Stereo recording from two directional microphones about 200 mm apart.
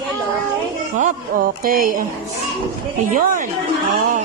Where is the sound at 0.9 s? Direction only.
45° right (ahead or behind).